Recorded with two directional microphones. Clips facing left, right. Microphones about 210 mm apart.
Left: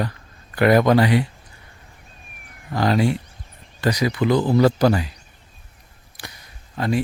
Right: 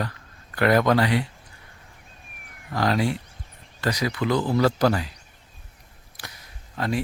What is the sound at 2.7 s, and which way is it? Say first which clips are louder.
Speech: left 4 dB; centre (ahead or behind).